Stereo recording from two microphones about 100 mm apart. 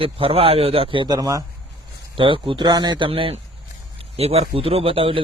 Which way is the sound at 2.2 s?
60° right (ahead or behind).